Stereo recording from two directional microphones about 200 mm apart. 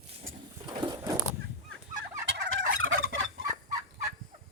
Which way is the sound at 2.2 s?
80° right.